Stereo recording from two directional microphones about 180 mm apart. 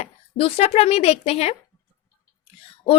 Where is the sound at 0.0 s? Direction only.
35° left (ahead or behind).